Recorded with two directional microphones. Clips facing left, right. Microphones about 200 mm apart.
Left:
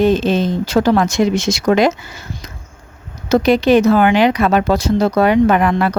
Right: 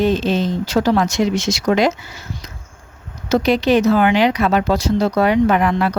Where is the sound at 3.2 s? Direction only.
50° left (ahead or behind).